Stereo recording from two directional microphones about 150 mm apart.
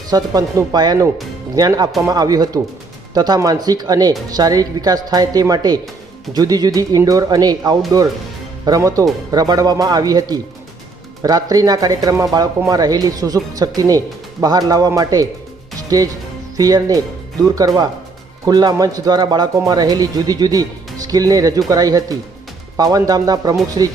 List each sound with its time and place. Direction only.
0.1 s speech: 25° right (ahead or behind)